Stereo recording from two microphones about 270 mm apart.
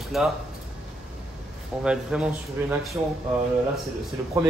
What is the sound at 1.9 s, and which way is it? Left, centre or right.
Speech, centre.